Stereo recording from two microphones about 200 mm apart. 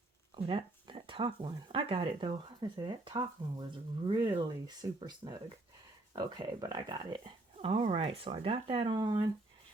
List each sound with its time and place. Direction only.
0.3 s speech: 25° right (ahead or behind)